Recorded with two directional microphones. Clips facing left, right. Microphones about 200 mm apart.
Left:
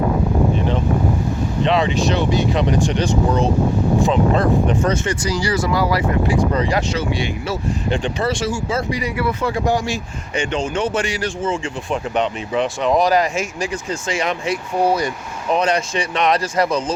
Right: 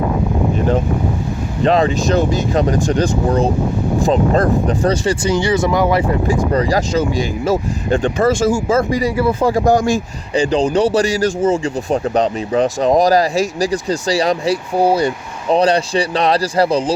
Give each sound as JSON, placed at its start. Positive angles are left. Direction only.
{"t": 1.6, "sound": "speech", "side_deg": -45}
{"t": 6.2, "sound": "speech", "side_deg": -40}
{"t": 9.1, "sound": "speech", "side_deg": -30}